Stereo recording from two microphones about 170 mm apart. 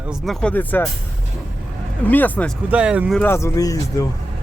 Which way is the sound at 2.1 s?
10° left (ahead or behind).